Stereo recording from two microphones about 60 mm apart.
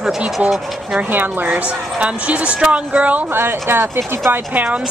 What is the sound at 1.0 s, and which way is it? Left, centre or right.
Speech, right.